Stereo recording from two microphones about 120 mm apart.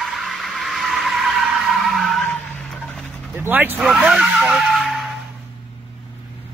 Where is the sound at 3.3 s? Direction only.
15° right (ahead or behind).